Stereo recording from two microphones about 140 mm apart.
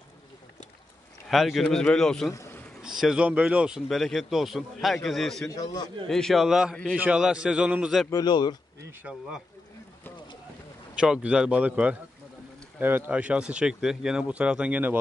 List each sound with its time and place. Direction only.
1.3 s speech: centre (ahead or behind)
2.3 s a sound: 20° left (ahead or behind)
2.8 s speech: 5° right (ahead or behind)
5.5 s a man's voice: 25° left (ahead or behind)
6.0 s speech: 5° left (ahead or behind)
8.1 s speech: 30° left (ahead or behind)
9.0 s speech: 5° right (ahead or behind)
11.0 s speech: 5° right (ahead or behind)